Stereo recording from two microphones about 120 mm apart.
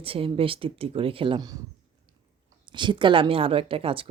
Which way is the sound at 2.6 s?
40° right (ahead or behind).